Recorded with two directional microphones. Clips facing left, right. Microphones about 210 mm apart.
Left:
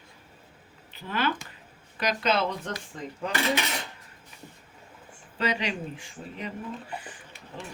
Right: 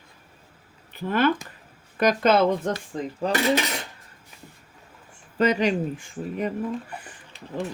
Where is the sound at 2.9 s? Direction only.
35° right (ahead or behind).